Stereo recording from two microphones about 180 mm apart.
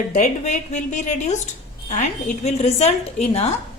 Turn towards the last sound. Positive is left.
turn(degrees=35)  # may be behind; listen again after turning